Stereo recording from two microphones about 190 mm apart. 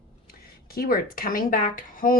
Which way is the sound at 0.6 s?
50° left (ahead or behind).